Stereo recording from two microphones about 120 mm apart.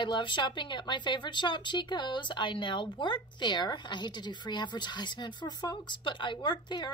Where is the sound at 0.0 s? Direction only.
40° left (ahead or behind).